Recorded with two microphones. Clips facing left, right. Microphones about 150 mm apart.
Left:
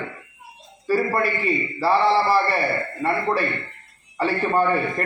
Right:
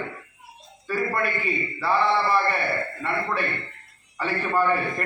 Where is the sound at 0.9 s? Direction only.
30° left (ahead or behind).